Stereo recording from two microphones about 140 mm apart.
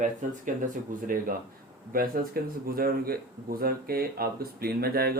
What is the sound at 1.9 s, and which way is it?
Speech, 90° right.